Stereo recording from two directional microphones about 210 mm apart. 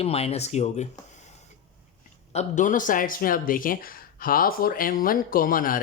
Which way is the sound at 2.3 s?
35° left (ahead or behind).